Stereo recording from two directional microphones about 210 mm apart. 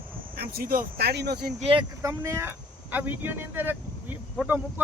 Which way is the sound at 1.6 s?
25° right (ahead or behind).